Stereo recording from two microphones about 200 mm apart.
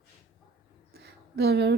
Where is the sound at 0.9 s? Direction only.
55° right (ahead or behind).